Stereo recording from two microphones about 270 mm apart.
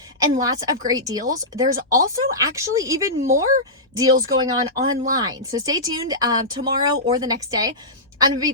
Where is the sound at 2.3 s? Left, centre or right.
Centre.